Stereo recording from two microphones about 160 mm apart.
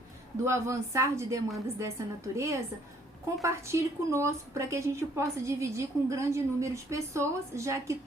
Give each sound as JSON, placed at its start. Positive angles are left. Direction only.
{"t": 0.4, "sound": "a woman's voice", "side_deg": -20}